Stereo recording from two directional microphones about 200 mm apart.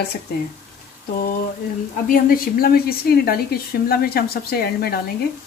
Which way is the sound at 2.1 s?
45° left (ahead or behind).